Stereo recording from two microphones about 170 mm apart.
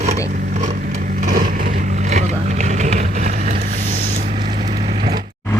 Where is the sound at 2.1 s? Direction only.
45° right (ahead or behind).